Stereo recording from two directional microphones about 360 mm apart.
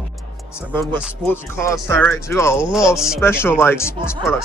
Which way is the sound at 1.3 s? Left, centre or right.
Centre.